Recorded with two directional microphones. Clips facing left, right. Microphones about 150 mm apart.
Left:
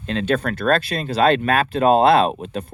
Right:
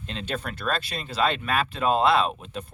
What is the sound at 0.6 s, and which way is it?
Speech, 50° left (ahead or behind).